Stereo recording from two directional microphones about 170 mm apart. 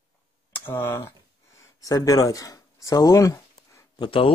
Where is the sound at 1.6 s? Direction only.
20° left (ahead or behind).